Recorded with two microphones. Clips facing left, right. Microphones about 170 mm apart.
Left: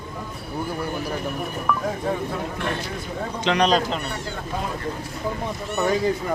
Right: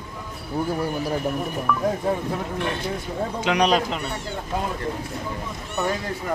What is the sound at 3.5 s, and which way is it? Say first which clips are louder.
Speech: left 1 dB; 10° right (ahead or behind).